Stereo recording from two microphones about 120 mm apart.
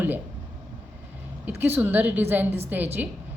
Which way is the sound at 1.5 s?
20° right (ahead or behind).